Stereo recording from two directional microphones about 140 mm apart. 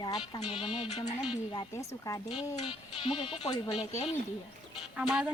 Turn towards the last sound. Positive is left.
turn(degrees=-5)  # may be behind; listen again after turning